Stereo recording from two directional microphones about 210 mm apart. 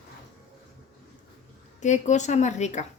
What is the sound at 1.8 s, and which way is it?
Speech, 35° left (ahead or behind).